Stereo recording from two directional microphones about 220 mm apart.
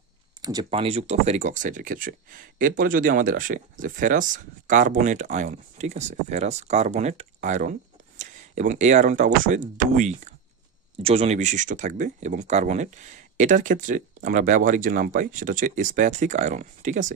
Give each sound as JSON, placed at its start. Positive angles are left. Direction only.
{"t": 0.4, "sound": "speech", "side_deg": -15}